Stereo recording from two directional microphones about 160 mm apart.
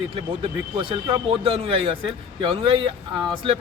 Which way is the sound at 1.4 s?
35° right (ahead or behind).